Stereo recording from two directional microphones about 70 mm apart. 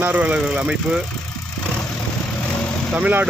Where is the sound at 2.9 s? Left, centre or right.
Right.